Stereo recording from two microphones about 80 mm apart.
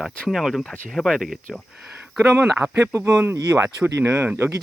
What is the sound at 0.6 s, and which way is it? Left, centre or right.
Speech, centre.